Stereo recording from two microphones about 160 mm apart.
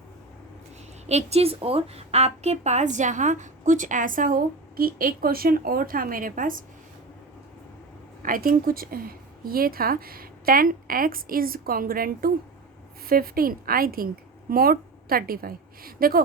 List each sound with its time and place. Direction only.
1.0 s a woman's voice: 40° right (ahead or behind); by 6.7 s 55° right (ahead or behind)
8.2 s a woman's voice: 60° right (ahead or behind)